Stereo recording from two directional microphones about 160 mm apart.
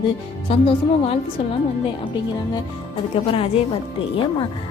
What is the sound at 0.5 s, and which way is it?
Speech, 35° left (ahead or behind).